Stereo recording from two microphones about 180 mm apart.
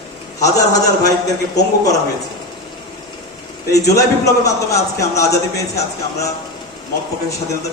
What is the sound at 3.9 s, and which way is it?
A man's voice, 15° left (ahead or behind).